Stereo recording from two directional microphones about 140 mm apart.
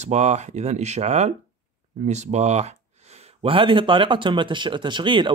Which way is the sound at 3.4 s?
40° right (ahead or behind).